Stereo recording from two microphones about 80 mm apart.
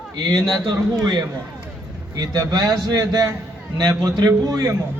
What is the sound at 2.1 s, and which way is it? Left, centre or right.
A man's voice, right.